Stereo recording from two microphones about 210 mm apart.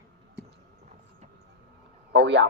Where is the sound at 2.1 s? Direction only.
55° right (ahead or behind).